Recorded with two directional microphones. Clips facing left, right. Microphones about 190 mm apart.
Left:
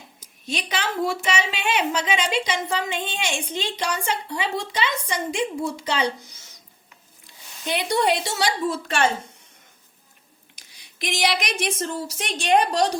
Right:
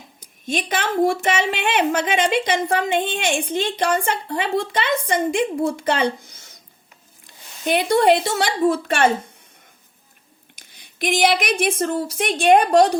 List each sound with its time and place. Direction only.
0.4 s speech: 50° right (ahead or behind)
7.7 s speech: 50° right (ahead or behind)
10.5 s a woman's voice: 50° right (ahead or behind)